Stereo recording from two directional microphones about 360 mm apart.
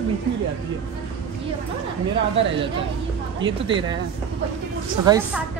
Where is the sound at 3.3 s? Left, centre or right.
Centre.